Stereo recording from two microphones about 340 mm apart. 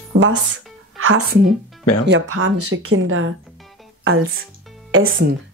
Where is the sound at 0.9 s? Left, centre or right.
Right.